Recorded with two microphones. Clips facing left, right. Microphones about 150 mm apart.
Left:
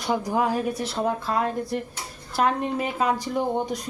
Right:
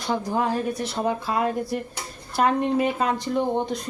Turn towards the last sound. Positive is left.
turn(degrees=10)  # may be behind; listen again after turning